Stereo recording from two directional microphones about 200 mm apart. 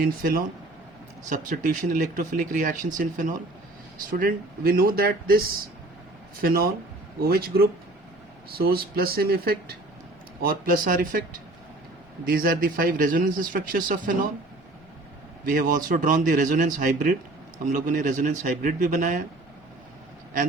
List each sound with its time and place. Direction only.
0.0 s a man's voice: 45° right (ahead or behind)
6.4 s a man's voice: 50° right (ahead or behind)
12.2 s a man's voice: 45° right (ahead or behind)
15.4 s speech: 45° right (ahead or behind)